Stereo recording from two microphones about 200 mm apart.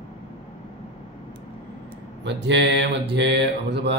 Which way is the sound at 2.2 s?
60° right (ahead or behind).